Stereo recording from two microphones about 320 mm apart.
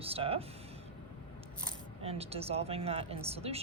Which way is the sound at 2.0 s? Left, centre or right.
Centre.